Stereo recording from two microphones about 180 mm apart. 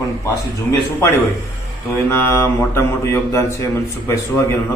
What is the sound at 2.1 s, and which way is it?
A man's voice, 15° left (ahead or behind).